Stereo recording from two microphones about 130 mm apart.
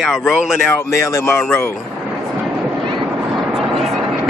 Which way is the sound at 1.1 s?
20° left (ahead or behind).